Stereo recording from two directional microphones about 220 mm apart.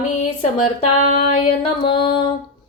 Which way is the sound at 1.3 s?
25° left (ahead or behind).